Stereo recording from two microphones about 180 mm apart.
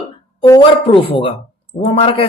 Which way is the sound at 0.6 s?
30° left (ahead or behind).